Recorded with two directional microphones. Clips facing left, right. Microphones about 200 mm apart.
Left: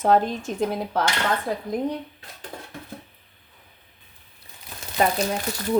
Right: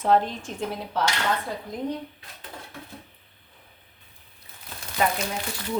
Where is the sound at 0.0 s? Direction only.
45° left (ahead or behind).